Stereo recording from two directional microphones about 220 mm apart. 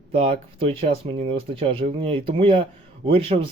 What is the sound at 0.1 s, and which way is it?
Speech, 25° right (ahead or behind).